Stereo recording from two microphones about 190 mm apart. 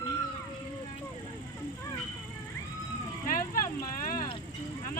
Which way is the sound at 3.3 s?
45° left (ahead or behind).